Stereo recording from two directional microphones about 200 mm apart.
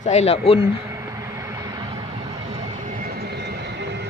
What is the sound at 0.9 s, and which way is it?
Vehicle, 15° right (ahead or behind).